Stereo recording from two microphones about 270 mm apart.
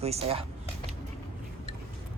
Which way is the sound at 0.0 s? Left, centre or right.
Right.